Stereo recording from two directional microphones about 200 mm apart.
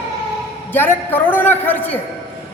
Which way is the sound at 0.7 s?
10° left (ahead or behind).